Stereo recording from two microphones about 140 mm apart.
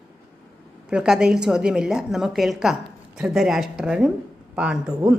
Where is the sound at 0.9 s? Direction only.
5° right (ahead or behind).